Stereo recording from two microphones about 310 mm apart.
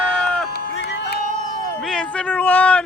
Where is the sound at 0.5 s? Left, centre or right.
Left.